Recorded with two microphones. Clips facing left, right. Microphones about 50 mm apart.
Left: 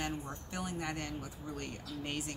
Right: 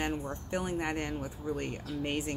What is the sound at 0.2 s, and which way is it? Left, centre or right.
A woman's voice, right.